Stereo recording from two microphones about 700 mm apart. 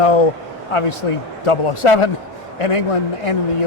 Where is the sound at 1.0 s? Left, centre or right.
Left.